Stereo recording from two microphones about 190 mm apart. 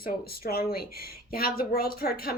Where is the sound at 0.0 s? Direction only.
55° left (ahead or behind).